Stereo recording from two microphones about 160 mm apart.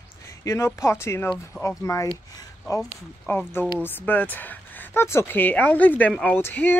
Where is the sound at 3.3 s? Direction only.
15° left (ahead or behind).